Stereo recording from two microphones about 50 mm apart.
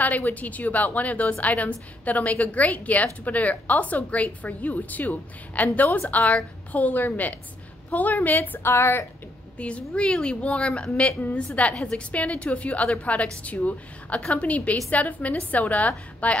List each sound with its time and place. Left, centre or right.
0.0 s a woman's voice: left
8.6 s a woman's voice: left
9.6 s a woman's voice: left